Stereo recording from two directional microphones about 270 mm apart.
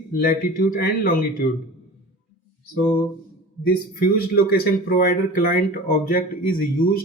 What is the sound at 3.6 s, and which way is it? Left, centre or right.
A man's voice, left.